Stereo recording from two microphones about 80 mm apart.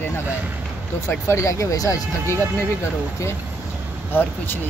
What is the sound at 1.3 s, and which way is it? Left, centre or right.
Speech, left.